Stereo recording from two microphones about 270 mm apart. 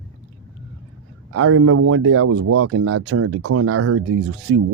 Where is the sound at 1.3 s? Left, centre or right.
Right.